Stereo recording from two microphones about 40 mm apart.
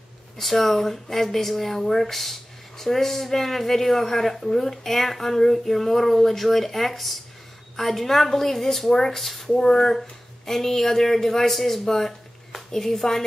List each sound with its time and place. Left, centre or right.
0.4 s a woman's voice: centre